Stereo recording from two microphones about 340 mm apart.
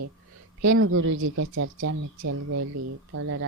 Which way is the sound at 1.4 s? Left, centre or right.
Right.